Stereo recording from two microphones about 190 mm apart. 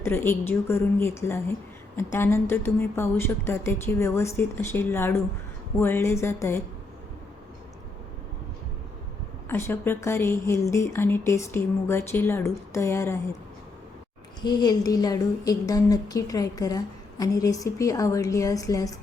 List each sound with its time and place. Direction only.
0.0 s a woman's voice: 10° left (ahead or behind)
9.5 s a woman's voice: 10° left (ahead or behind)
14.4 s a woman's voice: 20° left (ahead or behind)